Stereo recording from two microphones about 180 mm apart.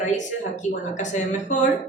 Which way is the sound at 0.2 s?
40° left (ahead or behind).